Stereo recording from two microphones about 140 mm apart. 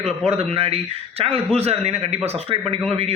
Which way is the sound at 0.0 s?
45° right (ahead or behind).